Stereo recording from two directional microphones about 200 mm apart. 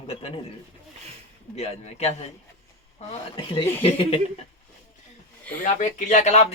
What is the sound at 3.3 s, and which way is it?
Speech, 25° left (ahead or behind).